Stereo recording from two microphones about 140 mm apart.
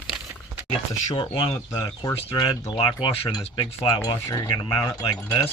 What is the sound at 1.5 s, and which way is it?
Speech, 25° left (ahead or behind).